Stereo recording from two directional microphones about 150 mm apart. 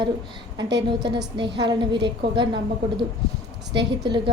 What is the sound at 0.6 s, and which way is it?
A woman's voice, 30° right (ahead or behind).